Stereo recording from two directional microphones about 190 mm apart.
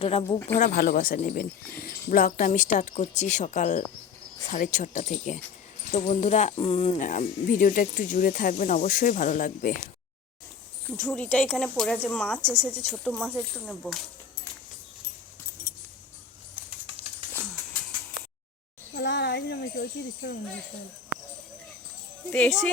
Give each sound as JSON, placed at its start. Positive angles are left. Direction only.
{"t": 0.0, "sound": "speech", "side_deg": 30}
{"t": 0.3, "sound": "speech", "side_deg": 10}
{"t": 0.6, "sound": "speech", "side_deg": 50}
{"t": 10.8, "sound": "speech", "side_deg": 10}
{"t": 12.8, "sound": "speech", "side_deg": 5}
{"t": 18.9, "sound": "speech", "side_deg": 65}
{"t": 22.3, "sound": "speech", "side_deg": 5}